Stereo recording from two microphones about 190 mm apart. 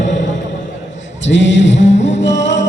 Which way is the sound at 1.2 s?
70° left (ahead or behind).